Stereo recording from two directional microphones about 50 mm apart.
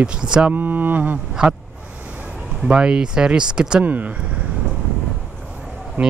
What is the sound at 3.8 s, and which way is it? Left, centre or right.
Speech, right.